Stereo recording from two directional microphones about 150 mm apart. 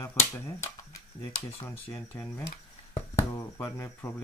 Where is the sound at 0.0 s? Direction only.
20° left (ahead or behind).